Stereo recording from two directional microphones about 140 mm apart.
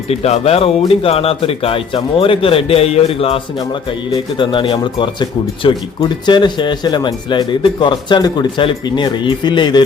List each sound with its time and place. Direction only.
0.1 s speech: 50° left (ahead or behind); by 9.8 s 30° left (ahead or behind)